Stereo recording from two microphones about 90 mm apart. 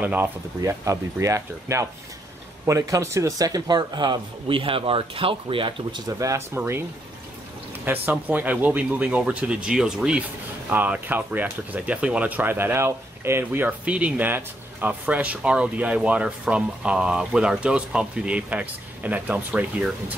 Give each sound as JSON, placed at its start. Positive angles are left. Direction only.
{"t": 0.0, "sound": "speech", "side_deg": -20}
{"t": 0.7, "sound": "speech", "side_deg": -35}
{"t": 6.1, "sound": "speech", "side_deg": -30}
{"t": 7.8, "sound": "speech", "side_deg": -20}
{"t": 10.7, "sound": "speech", "side_deg": -20}